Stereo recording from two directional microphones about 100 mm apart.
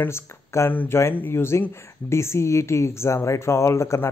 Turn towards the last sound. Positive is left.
turn(degrees=30)  # may be behind; listen again after turning